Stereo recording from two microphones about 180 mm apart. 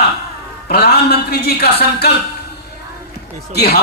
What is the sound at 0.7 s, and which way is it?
Speech, 60° left (ahead or behind).